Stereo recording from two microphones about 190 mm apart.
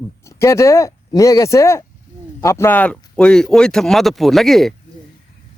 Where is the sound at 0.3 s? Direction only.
15° left (ahead or behind).